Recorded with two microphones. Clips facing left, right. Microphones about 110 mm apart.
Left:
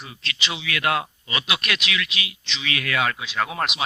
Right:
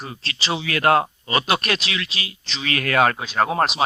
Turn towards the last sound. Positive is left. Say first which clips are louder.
# right 6 dB
turn(degrees=-40)  # may be behind; listen again after turning